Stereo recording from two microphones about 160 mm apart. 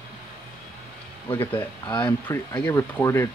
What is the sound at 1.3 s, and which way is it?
Speech, 15° left (ahead or behind).